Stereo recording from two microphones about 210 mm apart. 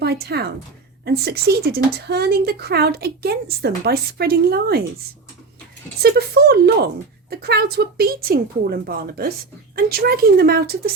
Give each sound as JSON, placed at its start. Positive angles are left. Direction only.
{"t": 0.0, "sound": "speech", "side_deg": -50}
{"t": 6.0, "sound": "speech", "side_deg": -50}